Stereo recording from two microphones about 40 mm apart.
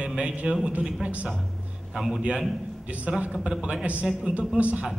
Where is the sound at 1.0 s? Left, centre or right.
Right.